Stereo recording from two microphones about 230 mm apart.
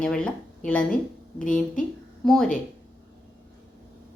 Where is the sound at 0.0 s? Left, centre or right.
Centre.